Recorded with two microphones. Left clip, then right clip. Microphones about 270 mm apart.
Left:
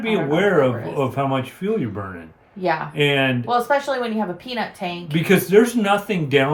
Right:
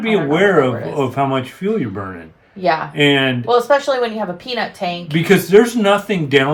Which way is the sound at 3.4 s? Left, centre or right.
Right.